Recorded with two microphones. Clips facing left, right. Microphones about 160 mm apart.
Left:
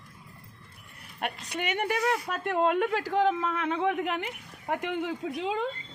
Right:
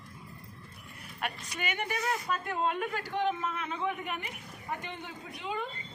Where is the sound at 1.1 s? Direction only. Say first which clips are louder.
Left 4 dB; 60° left (ahead or behind).